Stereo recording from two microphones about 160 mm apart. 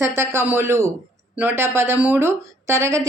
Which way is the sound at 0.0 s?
15° right (ahead or behind).